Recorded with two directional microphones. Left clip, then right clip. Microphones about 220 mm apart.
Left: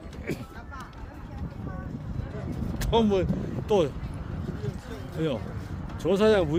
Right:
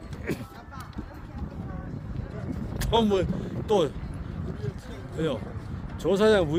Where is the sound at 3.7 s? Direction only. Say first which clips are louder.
Even; 20° right (ahead or behind).